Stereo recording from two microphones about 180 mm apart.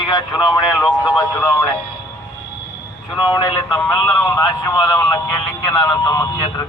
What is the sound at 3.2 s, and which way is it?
Speech, 25° left (ahead or behind).